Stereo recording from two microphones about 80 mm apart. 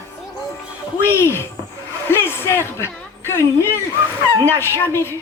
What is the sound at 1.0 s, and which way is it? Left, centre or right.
Speech, left.